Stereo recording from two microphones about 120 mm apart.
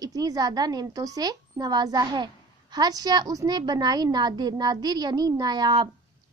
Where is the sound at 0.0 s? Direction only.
30° right (ahead or behind).